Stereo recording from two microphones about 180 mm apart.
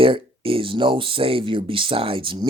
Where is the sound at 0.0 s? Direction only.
30° right (ahead or behind).